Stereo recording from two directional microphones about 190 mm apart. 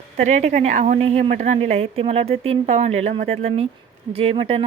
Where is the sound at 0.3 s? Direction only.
40° right (ahead or behind).